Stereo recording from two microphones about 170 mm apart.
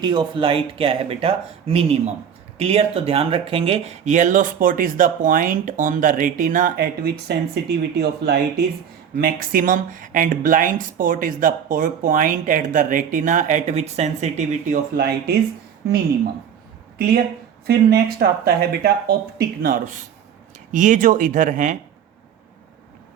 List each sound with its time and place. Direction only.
0.0 s speech: 25° right (ahead or behind); by 8.6 s 75° right (ahead or behind)
9.1 s speech: 60° right (ahead or behind); by 14.8 s 40° right (ahead or behind)
14.9 s speech: 65° right (ahead or behind)
17.7 s speech: 65° right (ahead or behind); by 21.8 s 50° right (ahead or behind)